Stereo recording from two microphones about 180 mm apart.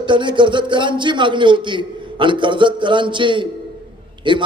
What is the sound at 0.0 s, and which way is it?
A man's voice, 25° right (ahead or behind).